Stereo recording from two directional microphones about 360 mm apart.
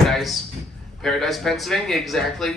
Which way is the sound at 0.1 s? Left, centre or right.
Centre.